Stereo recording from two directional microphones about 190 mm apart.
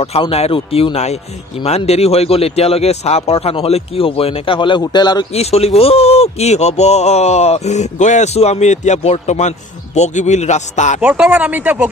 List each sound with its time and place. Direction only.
0.0 s speech: 30° left (ahead or behind)
5.3 s speech: 35° left (ahead or behind)
11.0 s speech: 5° right (ahead or behind)